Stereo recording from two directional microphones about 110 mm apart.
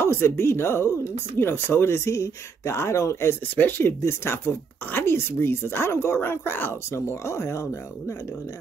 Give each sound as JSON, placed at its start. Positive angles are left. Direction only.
{"t": 0.0, "sound": "speech", "side_deg": 20}